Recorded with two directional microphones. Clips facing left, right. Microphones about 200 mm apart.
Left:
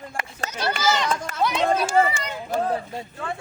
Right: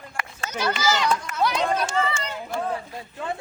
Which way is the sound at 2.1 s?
15° left (ahead or behind).